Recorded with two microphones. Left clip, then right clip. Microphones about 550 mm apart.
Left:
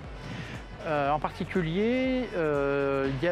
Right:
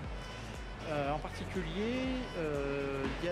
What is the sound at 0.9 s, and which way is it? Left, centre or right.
Speech, left.